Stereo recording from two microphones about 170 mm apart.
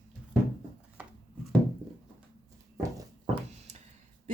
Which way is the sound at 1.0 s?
5° right (ahead or behind).